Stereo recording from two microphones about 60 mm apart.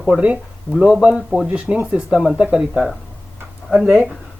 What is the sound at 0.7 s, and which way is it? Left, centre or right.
Speech, right.